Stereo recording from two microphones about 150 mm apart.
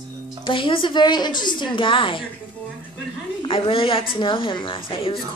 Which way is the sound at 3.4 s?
35° left (ahead or behind).